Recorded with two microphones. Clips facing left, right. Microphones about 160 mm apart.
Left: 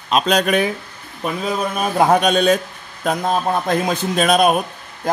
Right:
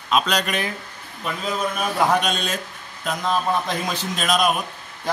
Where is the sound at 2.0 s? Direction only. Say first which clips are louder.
Left 7 dB; 55° left (ahead or behind).